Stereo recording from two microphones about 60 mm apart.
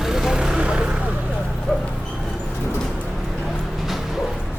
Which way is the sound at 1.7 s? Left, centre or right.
Centre.